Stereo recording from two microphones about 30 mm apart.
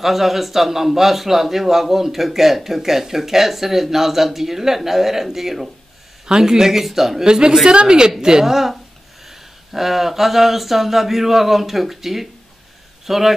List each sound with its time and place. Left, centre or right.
0.0 s speech: centre
6.2 s speech: right
7.2 s a woman's voice: right
8.5 s a man's voice: centre